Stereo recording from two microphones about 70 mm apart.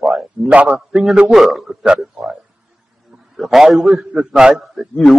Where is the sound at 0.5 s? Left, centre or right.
Centre.